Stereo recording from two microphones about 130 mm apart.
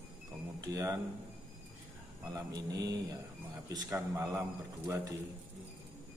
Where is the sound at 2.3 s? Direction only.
30° right (ahead or behind).